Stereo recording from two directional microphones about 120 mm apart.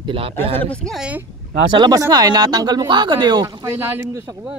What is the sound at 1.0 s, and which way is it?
Speech, 10° right (ahead or behind).